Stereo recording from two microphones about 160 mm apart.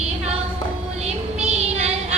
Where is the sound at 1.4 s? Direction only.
40° right (ahead or behind).